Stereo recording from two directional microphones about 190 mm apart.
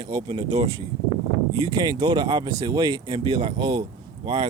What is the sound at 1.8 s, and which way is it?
Speech, 20° right (ahead or behind).